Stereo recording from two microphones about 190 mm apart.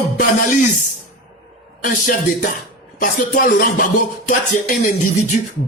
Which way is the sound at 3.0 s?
45° left (ahead or behind).